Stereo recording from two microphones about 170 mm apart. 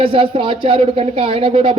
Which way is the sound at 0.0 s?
35° right (ahead or behind).